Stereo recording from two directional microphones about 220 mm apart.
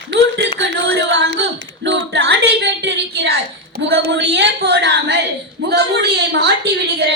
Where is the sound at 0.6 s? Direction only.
55° right (ahead or behind).